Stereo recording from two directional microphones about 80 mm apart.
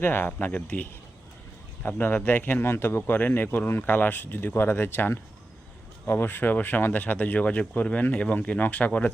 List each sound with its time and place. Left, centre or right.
0.0 s speech: left